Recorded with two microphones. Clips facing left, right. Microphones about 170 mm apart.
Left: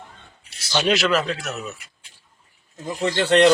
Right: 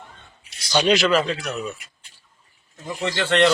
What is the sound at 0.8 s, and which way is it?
Speech, centre (ahead or behind).